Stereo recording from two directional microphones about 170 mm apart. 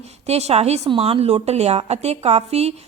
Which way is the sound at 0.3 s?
40° right (ahead or behind).